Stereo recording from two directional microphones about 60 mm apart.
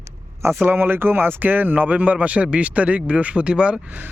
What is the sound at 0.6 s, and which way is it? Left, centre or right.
Speech, right.